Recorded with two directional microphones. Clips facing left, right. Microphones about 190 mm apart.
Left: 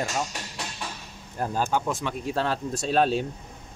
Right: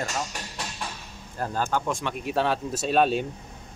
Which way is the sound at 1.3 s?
15° left (ahead or behind).